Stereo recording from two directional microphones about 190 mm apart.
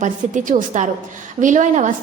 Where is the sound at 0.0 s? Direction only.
40° right (ahead or behind).